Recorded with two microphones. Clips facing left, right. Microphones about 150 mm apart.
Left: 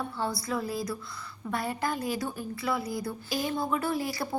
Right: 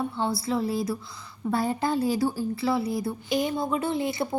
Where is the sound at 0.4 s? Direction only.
25° right (ahead or behind).